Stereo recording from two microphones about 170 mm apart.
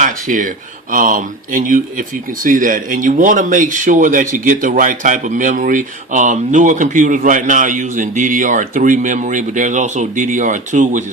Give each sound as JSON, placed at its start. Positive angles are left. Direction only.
{"t": 0.0, "sound": "speech", "side_deg": -50}